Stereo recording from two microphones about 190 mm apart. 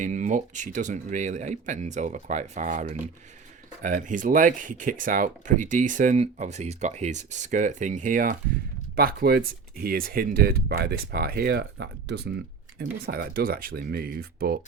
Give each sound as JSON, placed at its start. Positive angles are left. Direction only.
{"t": 0.0, "sound": "speech", "side_deg": -40}
{"t": 12.8, "sound": "speech", "side_deg": -50}